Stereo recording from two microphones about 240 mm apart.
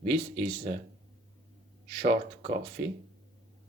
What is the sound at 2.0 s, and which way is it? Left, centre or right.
Speech, right.